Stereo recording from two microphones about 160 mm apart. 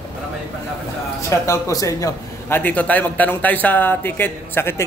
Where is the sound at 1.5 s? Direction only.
20° left (ahead or behind).